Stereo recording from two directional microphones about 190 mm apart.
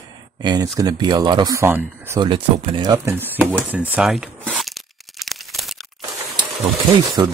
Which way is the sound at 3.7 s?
10° right (ahead or behind).